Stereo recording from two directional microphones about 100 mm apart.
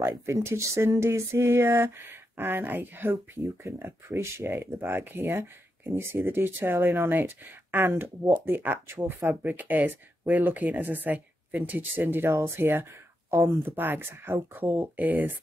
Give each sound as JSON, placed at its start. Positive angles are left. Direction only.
{"t": 0.0, "sound": "speech", "side_deg": -25}